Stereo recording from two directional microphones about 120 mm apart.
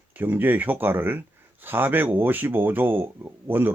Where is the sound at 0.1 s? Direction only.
15° right (ahead or behind).